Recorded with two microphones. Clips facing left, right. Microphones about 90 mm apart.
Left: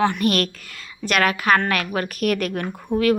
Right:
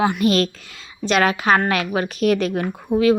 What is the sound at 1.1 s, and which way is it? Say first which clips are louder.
A woman's voice: right 2 dB; 25° right (ahead or behind).